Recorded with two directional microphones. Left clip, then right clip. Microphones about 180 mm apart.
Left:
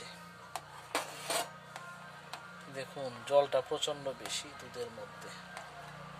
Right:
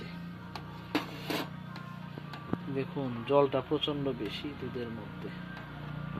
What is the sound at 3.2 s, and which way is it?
Speech, 25° left (ahead or behind).